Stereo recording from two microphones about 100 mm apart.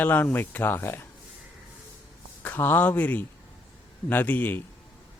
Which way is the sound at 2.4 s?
20° left (ahead or behind).